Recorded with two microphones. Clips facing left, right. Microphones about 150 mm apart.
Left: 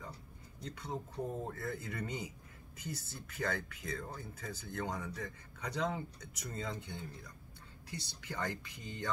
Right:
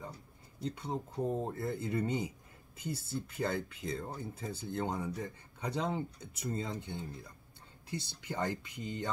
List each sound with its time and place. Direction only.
0.7 s speech: 25° right (ahead or behind)